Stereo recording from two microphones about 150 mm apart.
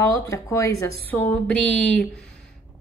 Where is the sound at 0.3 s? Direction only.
20° left (ahead or behind).